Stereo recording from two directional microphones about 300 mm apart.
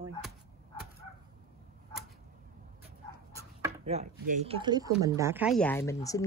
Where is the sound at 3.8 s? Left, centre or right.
Right; by 6.2 s centre.